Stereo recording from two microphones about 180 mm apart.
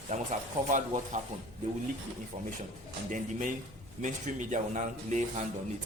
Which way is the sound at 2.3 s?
35° right (ahead or behind).